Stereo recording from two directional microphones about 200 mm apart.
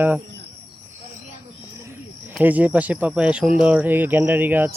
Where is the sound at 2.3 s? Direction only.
10° right (ahead or behind).